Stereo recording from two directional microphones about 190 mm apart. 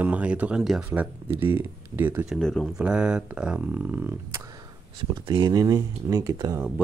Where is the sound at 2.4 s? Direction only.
Centre (ahead or behind).